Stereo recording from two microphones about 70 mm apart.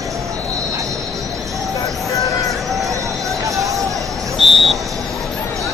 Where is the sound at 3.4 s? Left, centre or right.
Right.